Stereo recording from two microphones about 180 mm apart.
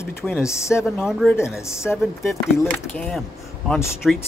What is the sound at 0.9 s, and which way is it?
Speech, centre (ahead or behind).